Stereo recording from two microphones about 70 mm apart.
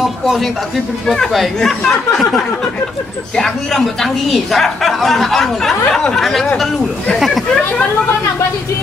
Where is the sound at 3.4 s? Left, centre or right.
Centre.